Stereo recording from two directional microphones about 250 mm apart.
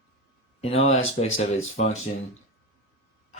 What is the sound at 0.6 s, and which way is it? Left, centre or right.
Speech, left.